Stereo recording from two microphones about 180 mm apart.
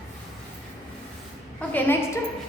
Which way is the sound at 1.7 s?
10° left (ahead or behind).